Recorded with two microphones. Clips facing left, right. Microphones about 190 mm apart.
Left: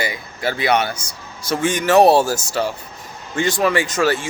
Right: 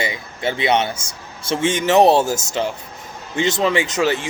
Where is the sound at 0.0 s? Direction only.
25° right (ahead or behind).